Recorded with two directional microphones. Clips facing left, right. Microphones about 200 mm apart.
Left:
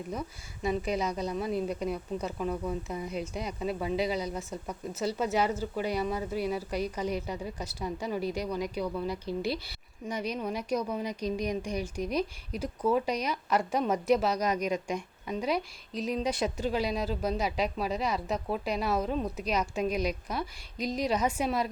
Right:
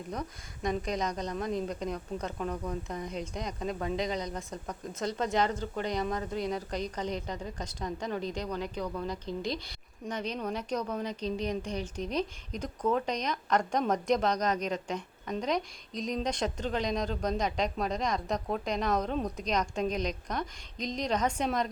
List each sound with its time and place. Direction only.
0.1 s a woman's voice: 5° left (ahead or behind)